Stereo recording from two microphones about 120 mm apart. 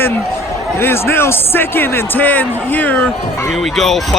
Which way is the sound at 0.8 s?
20° left (ahead or behind).